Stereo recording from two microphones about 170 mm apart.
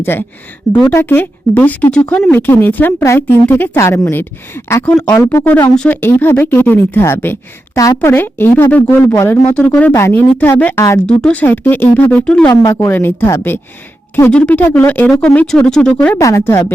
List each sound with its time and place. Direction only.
0.0 s speech: 10° left (ahead or behind)
12.5 s speech: 20° left (ahead or behind); by 16.1 s 5° left (ahead or behind)
16.1 s speech: 15° left (ahead or behind)